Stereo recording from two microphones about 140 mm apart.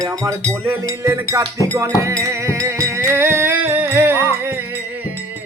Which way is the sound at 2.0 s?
20° right (ahead or behind).